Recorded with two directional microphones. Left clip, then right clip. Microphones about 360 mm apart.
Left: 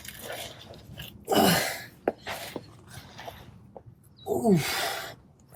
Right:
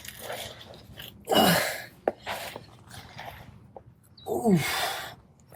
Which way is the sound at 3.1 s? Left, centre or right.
Right.